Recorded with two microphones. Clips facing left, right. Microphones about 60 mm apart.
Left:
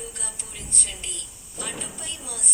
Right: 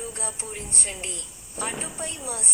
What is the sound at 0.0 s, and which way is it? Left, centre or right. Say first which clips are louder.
A woman's voice: right 5 dB; right.